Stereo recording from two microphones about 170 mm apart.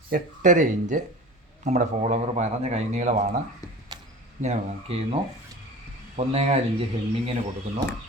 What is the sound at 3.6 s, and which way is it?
Speech, 20° left (ahead or behind).